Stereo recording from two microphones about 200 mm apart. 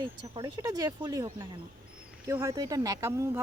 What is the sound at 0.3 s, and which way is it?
Speech, 20° right (ahead or behind).